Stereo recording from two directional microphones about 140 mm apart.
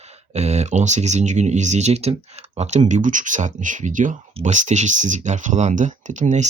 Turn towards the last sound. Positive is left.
turn(degrees=-60)  # may be behind; listen again after turning